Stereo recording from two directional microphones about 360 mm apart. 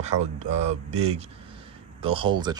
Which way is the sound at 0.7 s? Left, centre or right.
Centre.